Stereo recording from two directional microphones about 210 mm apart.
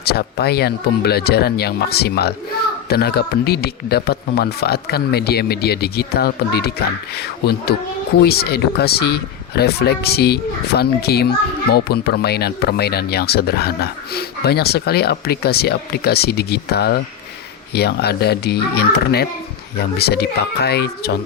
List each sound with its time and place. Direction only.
0.0 s speech: 50° left (ahead or behind)